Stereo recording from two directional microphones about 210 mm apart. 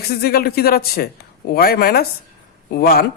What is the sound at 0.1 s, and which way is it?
Speech, 45° left (ahead or behind).